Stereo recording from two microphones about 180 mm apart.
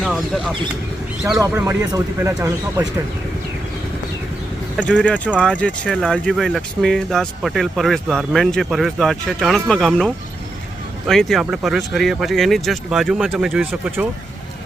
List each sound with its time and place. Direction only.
0.0 s speech: centre (ahead or behind)
1.4 s speech: 15° right (ahead or behind)
4.8 s speech: 5° left (ahead or behind)